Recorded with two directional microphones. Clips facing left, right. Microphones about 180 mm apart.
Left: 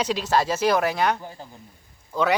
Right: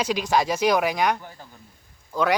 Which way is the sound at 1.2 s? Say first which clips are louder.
Left 4 dB; 20° left (ahead or behind).